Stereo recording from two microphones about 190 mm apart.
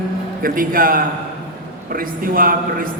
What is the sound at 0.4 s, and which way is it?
A man's voice, 45° right (ahead or behind).